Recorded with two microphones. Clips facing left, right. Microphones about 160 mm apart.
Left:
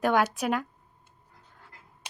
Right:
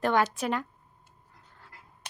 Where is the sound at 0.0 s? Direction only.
5° left (ahead or behind).